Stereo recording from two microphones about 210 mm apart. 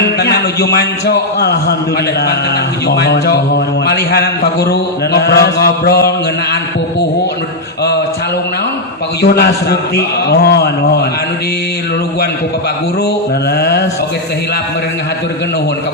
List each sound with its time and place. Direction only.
0.0 s a man's voice: 50° left (ahead or behind)
2.8 s a man's voice: 50° left (ahead or behind)
9.2 s a man's voice: 50° left (ahead or behind)
13.6 s a man's voice: 50° left (ahead or behind)